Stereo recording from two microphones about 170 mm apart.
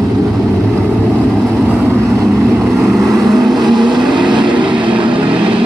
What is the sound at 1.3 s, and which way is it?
Vehicle, 10° right (ahead or behind).